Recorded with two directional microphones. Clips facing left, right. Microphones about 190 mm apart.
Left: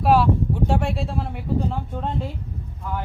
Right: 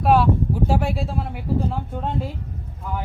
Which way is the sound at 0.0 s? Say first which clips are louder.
Even; centre (ahead or behind).